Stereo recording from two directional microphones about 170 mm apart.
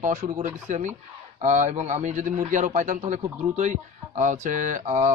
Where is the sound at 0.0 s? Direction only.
45° right (ahead or behind).